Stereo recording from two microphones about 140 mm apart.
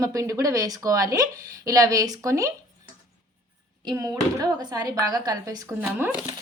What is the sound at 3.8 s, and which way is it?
A woman's voice, 25° right (ahead or behind).